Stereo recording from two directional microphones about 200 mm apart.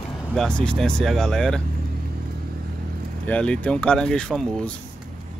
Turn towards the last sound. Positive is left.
turn(degrees=5)  # may be behind; listen again after turning